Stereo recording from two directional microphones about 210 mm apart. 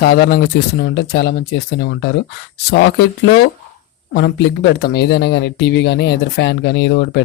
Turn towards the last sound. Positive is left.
turn(degrees=55)  # may be behind; listen again after turning